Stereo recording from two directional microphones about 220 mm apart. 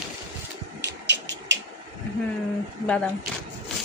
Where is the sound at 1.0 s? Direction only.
55° right (ahead or behind).